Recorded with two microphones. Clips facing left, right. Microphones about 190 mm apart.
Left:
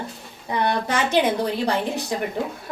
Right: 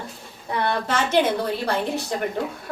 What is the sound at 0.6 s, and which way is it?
A woman's voice, 15° left (ahead or behind).